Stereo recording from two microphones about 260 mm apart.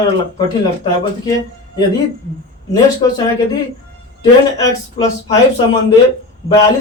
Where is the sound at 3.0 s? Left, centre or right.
Centre.